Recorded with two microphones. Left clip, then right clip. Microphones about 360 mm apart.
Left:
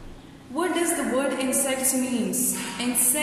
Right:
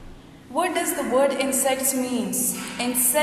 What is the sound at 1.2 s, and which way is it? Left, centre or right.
Speech, centre.